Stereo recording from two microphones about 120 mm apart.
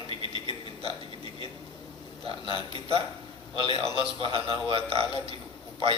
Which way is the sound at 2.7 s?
50° right (ahead or behind).